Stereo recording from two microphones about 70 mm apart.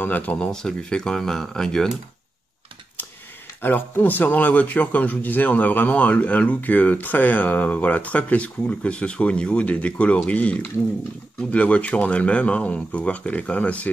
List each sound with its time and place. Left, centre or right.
0.0 s speech: left
0.5 s speech: centre
3.6 s speech: left